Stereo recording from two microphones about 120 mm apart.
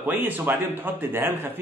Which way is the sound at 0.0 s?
15° right (ahead or behind).